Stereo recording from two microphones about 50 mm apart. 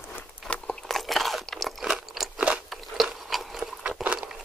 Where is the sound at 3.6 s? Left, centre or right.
Centre.